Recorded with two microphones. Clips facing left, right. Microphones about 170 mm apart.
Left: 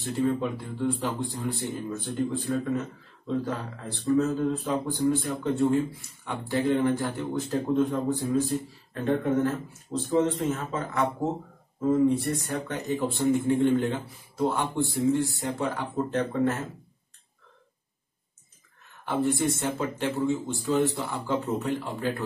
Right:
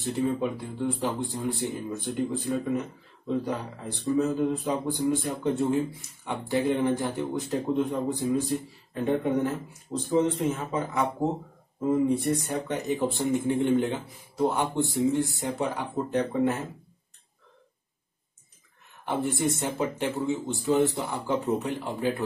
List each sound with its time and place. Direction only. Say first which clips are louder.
0.0 s speech: even; 15° right (ahead or behind)
19.0 s speech: left 2 dB; 20° right (ahead or behind)